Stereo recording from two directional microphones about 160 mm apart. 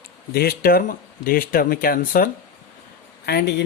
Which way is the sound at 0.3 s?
70° left (ahead or behind).